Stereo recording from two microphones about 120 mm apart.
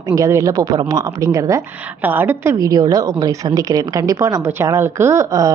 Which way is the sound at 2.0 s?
15° right (ahead or behind).